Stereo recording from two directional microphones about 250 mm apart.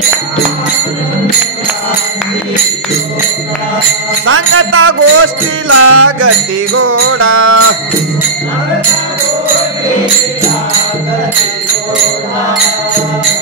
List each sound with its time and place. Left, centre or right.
4.3 s music: right